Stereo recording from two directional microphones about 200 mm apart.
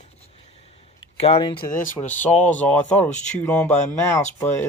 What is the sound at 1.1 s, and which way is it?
Speech, 30° left (ahead or behind).